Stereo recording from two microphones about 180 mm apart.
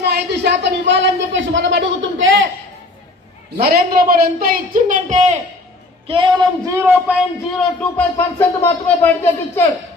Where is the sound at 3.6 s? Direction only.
60° right (ahead or behind); by 5.4 s 40° right (ahead or behind).